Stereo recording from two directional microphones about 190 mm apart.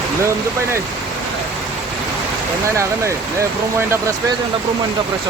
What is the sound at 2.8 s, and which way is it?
Speech, 15° right (ahead or behind).